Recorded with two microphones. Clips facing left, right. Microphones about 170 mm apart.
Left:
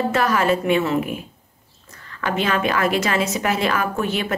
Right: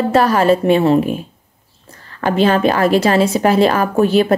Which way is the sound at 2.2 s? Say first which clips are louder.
Right 8 dB; 35° right (ahead or behind).